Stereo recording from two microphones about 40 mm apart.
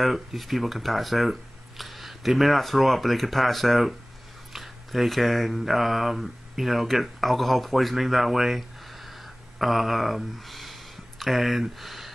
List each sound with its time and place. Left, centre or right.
0.0 s speech: centre